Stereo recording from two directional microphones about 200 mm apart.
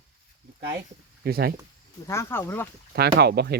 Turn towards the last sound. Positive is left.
turn(degrees=-55)  # may be behind; listen again after turning